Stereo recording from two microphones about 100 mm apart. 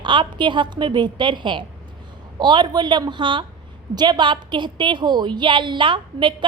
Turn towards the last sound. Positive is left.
turn(degrees=-55)  # may be behind; listen again after turning